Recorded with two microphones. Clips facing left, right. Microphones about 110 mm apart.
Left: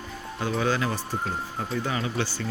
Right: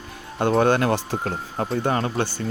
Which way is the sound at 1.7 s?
50° right (ahead or behind).